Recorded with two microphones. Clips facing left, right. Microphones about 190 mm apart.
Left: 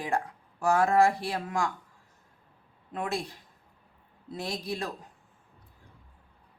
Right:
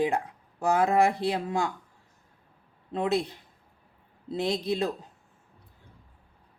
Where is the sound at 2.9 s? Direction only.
20° right (ahead or behind).